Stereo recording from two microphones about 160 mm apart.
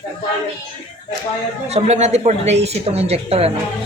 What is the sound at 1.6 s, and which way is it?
Speech, 40° right (ahead or behind).